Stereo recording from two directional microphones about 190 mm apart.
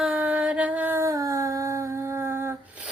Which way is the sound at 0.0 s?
5° right (ahead or behind).